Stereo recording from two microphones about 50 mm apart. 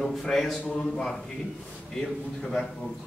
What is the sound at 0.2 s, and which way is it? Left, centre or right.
A man's voice, centre.